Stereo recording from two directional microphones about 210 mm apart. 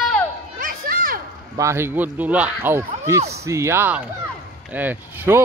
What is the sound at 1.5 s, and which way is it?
Speech, 15° right (ahead or behind).